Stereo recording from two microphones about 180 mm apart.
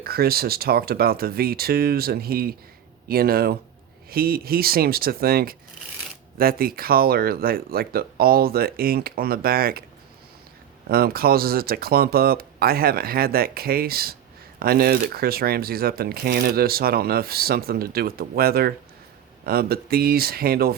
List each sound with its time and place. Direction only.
0.0 s speech: 60° right (ahead or behind)
10.8 s speech: 55° right (ahead or behind)